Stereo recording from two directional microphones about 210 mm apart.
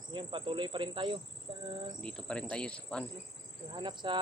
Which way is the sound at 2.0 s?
5° left (ahead or behind).